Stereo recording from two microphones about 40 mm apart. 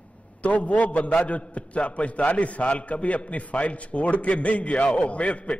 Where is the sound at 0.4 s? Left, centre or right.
Left.